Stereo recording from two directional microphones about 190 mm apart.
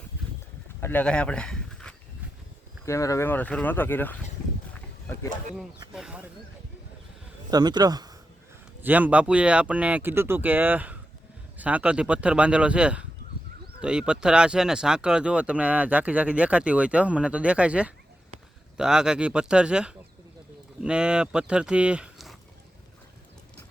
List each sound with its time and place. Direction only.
0.8 s speech: 10° left (ahead or behind)
2.8 s speech: 15° left (ahead or behind)
5.9 s speech: 5° right (ahead or behind)
7.5 s speech: 20° right (ahead or behind)
8.8 s speech: 10° right (ahead or behind)